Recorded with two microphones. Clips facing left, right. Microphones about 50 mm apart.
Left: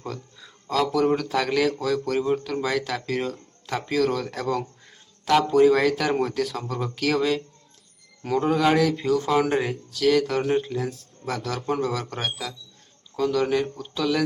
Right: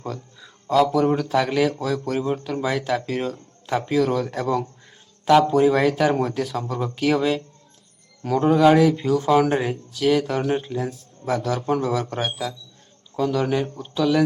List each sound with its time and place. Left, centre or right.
0.0 s speech: centre
8.2 s speech: centre
8.4 s speech: centre
9.9 s speech: centre